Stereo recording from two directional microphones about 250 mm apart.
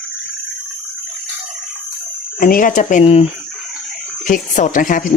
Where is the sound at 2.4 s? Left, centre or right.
Left.